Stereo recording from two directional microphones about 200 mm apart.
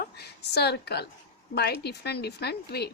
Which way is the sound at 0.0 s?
55° left (ahead or behind).